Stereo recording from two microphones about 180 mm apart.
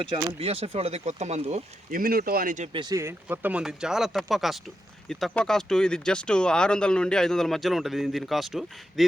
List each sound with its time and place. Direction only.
0.3 s speech: 35° right (ahead or behind)
1.9 s speech: 50° right (ahead or behind)
2.7 s speech: 15° right (ahead or behind); by 9.0 s centre (ahead or behind)